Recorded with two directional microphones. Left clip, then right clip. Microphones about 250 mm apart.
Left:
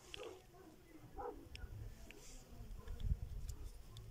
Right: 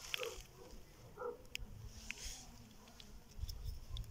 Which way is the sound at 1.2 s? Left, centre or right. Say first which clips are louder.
Right 3 dB; left.